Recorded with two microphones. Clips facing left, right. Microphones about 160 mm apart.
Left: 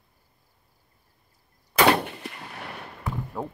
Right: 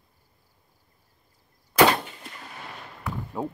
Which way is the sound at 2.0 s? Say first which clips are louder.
Left 6 dB; 70° left (ahead or behind).